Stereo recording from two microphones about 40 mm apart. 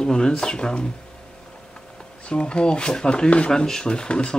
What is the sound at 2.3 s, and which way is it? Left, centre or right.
Speech, left.